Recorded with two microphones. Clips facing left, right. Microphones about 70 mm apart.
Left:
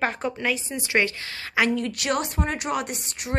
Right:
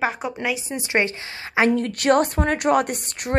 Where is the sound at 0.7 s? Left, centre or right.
Right.